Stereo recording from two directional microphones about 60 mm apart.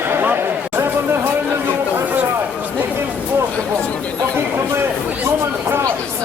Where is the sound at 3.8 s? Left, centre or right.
Left.